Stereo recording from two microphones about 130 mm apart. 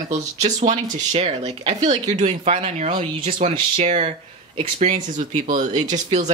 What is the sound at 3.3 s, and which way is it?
Speech, 60° right (ahead or behind).